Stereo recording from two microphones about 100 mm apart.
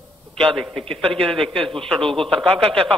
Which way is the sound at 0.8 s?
70° right (ahead or behind).